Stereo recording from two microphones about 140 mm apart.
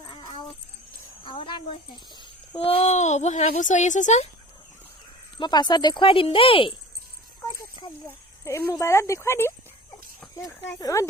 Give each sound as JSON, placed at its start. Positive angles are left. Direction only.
{"t": 0.1, "sound": "dog", "side_deg": 35}
{"t": 1.2, "sound": "a sound", "side_deg": 35}
{"t": 2.6, "sound": "a woman's voice", "side_deg": 45}
{"t": 5.4, "sound": "speech", "side_deg": 30}
{"t": 8.0, "sound": "speech", "side_deg": 20}
{"t": 10.8, "sound": "speech", "side_deg": 25}